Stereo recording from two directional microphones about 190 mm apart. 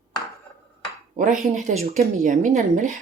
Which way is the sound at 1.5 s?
40° right (ahead or behind).